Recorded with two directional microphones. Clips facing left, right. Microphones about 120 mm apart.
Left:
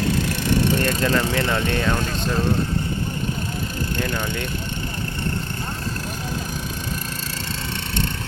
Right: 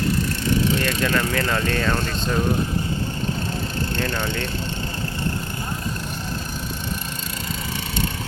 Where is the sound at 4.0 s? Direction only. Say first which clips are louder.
Even; 15° left (ahead or behind).